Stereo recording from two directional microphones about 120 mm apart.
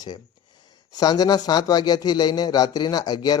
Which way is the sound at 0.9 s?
35° left (ahead or behind).